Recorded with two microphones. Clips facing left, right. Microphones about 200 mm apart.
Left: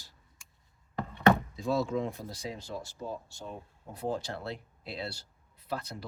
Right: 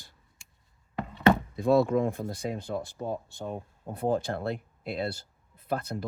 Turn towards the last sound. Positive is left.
turn(degrees=-55)  # may be behind; listen again after turning